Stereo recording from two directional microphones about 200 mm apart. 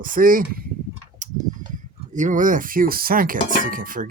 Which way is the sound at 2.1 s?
40° right (ahead or behind).